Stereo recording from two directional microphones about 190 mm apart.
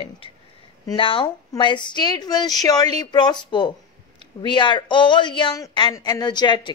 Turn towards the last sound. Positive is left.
turn(degrees=25)  # may be behind; listen again after turning